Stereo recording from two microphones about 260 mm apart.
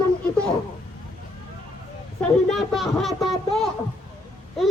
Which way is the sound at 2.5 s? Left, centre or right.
Centre.